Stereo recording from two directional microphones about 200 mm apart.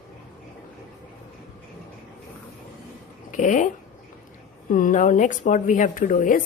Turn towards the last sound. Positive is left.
turn(degrees=40)  # may be behind; listen again after turning